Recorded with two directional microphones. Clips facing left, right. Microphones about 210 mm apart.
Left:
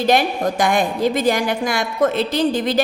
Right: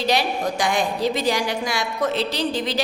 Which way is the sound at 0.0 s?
50° left (ahead or behind).